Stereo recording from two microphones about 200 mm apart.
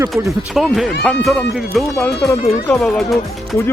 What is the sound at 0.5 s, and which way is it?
Speech, centre (ahead or behind).